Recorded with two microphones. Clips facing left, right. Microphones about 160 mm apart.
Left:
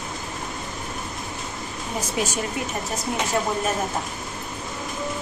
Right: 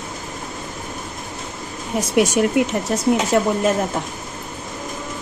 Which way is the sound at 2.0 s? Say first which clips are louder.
Right 10 dB; 85° right.